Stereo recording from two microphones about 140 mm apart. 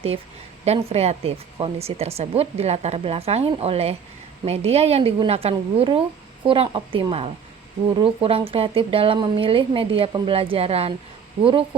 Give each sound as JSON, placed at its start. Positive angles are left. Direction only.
{"t": 0.6, "sound": "speech", "side_deg": -50}